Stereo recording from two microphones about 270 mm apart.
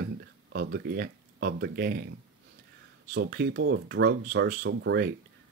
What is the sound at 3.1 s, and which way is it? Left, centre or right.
Speech, right.